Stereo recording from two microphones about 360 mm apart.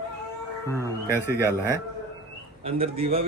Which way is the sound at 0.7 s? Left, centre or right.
Centre.